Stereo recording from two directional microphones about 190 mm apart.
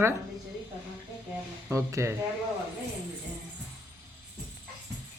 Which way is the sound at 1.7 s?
15° right (ahead or behind).